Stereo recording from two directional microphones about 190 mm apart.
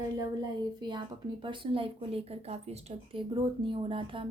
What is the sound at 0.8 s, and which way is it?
A woman's voice, 25° right (ahead or behind).